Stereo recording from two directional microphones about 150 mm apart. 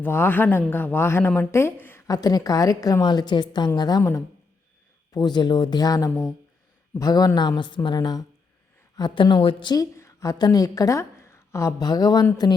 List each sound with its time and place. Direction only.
0.0 s a woman's voice: 15° left (ahead or behind)